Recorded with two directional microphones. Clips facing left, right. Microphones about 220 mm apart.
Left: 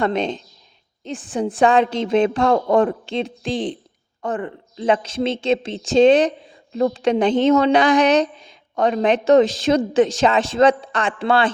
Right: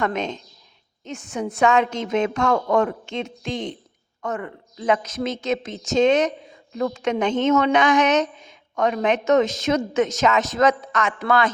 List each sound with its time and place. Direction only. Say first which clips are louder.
0.0 s a woman's voice: left 4 dB; 30° left (ahead or behind)